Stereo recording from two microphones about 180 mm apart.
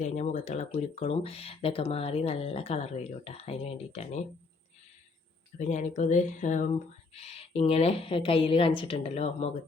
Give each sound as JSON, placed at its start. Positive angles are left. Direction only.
{"t": 0.0, "sound": "speech", "side_deg": 40}
{"t": 5.5, "sound": "speech", "side_deg": 40}